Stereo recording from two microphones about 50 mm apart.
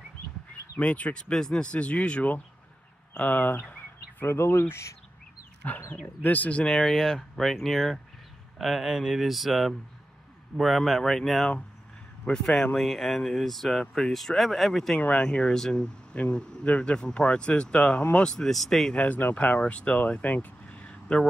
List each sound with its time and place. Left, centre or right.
0.7 s speech: left
1.3 s speech: centre
3.2 s a sound: left
4.3 s speech: left
5.6 s speech: left
6.6 s speech: centre
15.0 s speech: left
15.2 s speech: centre
18.5 s speech: centre
18.9 s speech: left
19.6 s speech: left